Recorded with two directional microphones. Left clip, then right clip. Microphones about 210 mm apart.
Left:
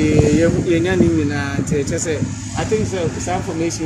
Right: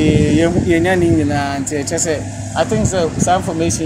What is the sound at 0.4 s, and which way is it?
Speech, 20° right (ahead or behind).